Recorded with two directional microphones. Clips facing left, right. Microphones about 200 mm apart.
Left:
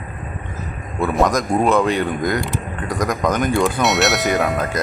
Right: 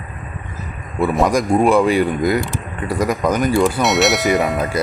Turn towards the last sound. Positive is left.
turn(degrees=-10)  # may be behind; listen again after turning